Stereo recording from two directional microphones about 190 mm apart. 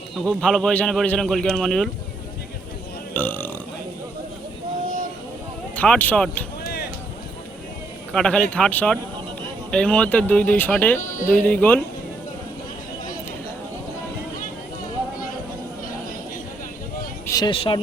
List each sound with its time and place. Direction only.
0.3 s speech: 5° left (ahead or behind)
3.2 s speech: 10° left (ahead or behind)
5.7 s speech: 10° left (ahead or behind)
6.7 s a sound: 55° left (ahead or behind)
8.1 s speech: 5° left (ahead or behind)
11.0 s speech: 40° left (ahead or behind)
11.4 s speech: 10° left (ahead or behind)
17.2 s speech: 20° left (ahead or behind)